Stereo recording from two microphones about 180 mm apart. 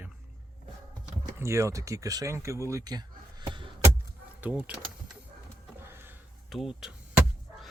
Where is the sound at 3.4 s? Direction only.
25° right (ahead or behind).